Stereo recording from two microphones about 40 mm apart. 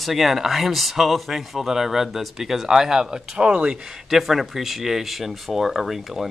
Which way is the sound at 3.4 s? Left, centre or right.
Right.